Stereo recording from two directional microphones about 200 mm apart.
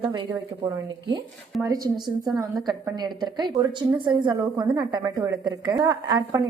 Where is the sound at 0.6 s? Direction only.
20° right (ahead or behind).